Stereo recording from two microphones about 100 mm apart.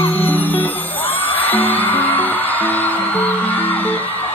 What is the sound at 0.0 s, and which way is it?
Music, 20° left (ahead or behind).